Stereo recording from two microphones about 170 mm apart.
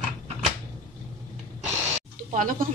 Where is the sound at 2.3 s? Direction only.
55° right (ahead or behind).